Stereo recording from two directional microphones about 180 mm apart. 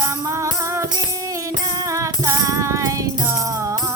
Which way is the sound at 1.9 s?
15° right (ahead or behind).